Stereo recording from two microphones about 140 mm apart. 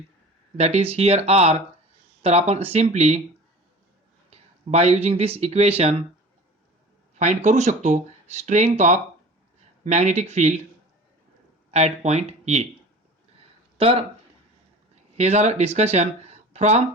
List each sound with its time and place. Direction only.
0.5 s speech: 50° right (ahead or behind)
4.3 s speech: 50° right (ahead or behind)
7.2 s speech: 55° right (ahead or behind)
11.7 s speech: 50° right (ahead or behind)
13.7 s speech: 40° right (ahead or behind)
15.2 s speech: 50° right (ahead or behind)